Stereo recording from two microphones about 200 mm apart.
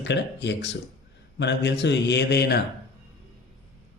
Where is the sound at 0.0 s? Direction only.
60° left (ahead or behind).